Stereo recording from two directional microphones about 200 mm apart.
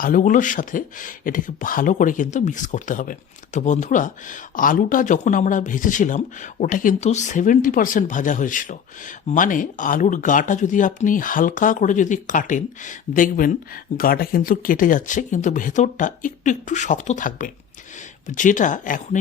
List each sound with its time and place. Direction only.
0.0 s speech: 40° left (ahead or behind)